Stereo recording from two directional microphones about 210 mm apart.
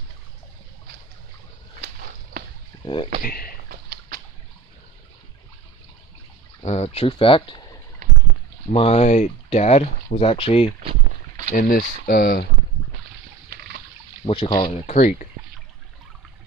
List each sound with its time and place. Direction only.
2.8 s speech: 25° left (ahead or behind)
3.2 s speech: 45° left (ahead or behind)
6.6 s speech: 30° left (ahead or behind)
8.6 s speech: 30° left (ahead or behind)
10.8 s rowboat: 30° right (ahead or behind)
11.5 s speech: 45° left (ahead or behind)
14.2 s speech: 25° left (ahead or behind)